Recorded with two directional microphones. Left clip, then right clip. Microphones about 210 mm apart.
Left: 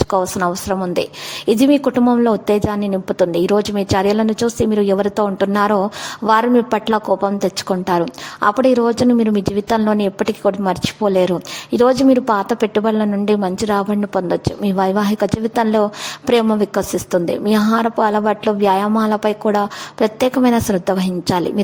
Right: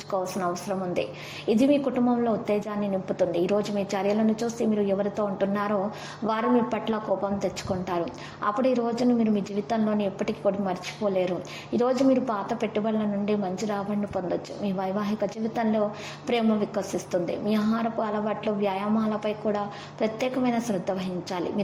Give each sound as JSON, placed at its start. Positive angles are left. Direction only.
{"t": 0.1, "sound": "a woman's voice", "side_deg": 40}
{"t": 2.5, "sound": "a woman's voice", "side_deg": 40}
{"t": 3.2, "sound": "a woman's voice", "side_deg": 55}
{"t": 12.1, "sound": "a woman's voice", "side_deg": 40}
{"t": 14.6, "sound": "a woman's voice", "side_deg": 35}
{"t": 17.5, "sound": "a woman's voice", "side_deg": 35}
{"t": 18.0, "sound": "a woman's voice", "side_deg": 45}
{"t": 20.3, "sound": "a woman's voice", "side_deg": 40}